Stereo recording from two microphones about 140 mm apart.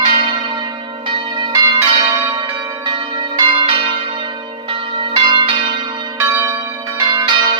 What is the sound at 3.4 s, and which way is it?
Change ringing, 40° right (ahead or behind).